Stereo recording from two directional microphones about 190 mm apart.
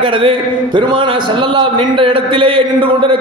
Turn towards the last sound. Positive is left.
turn(degrees=-25)  # may be behind; listen again after turning